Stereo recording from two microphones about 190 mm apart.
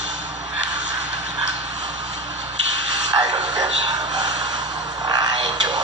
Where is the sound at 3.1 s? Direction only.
20° right (ahead or behind).